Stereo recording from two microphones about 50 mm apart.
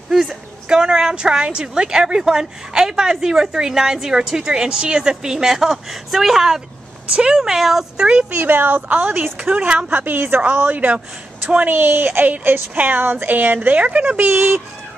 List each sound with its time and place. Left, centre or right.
0.3 s a woman's voice: centre
7.1 s a woman's voice: centre
7.4 s a woman's voice: centre
8.3 s a woman's voice: right
8.8 s a woman's voice: right
9.8 s a woman's voice: right
14.2 s a woman's voice: right